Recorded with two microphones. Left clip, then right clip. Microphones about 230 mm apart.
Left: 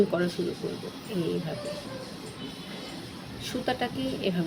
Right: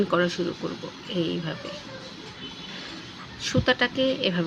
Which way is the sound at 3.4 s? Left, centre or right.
Right.